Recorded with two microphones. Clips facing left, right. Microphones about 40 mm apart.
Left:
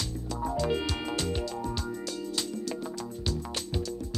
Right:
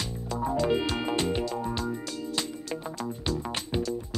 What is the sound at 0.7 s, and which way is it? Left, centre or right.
Music, right.